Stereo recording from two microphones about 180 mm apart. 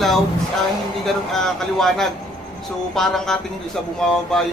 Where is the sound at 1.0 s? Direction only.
Centre (ahead or behind).